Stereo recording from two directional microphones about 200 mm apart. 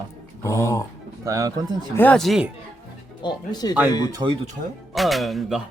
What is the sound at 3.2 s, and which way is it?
Speech, 20° left (ahead or behind).